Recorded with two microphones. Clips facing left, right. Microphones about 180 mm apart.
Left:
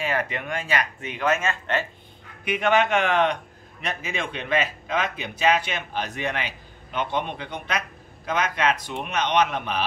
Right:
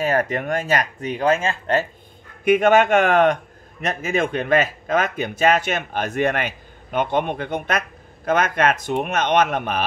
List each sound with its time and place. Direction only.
0.0 s speech: 45° right (ahead or behind)
2.4 s speech: 45° right (ahead or behind)